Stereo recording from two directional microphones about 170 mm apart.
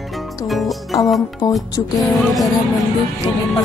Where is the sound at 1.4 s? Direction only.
20° left (ahead or behind).